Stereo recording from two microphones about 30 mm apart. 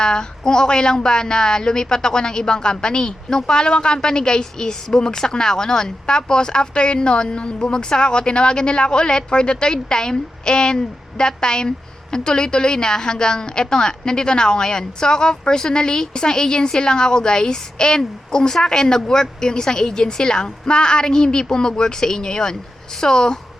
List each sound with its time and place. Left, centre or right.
0.0 s speech: left